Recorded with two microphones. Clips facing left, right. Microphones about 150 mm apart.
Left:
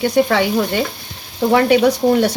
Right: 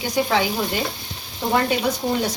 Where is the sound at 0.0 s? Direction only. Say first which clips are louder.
Left 6 dB; 65° left (ahead or behind).